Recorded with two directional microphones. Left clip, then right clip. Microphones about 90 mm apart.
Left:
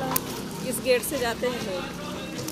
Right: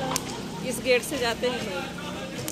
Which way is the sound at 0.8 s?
20° right (ahead or behind).